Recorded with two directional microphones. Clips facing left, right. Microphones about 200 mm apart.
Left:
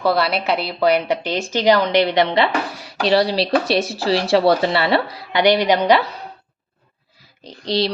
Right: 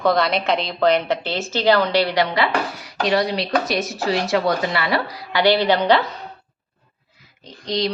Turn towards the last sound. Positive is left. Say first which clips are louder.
# left 2 dB
turn(degrees=30)  # may be behind; listen again after turning